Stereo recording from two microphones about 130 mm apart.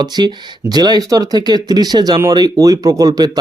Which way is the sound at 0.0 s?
35° right (ahead or behind).